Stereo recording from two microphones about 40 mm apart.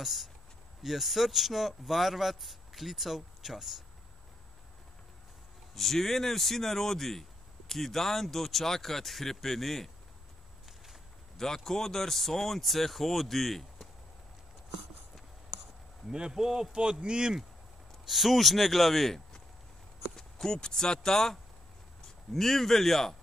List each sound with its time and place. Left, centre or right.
0.0 s speech: centre
5.8 s speech: centre
11.3 s speech: centre
16.1 s speech: centre
16.3 s a man's voice: centre
16.7 s speech: right
18.0 s speech: centre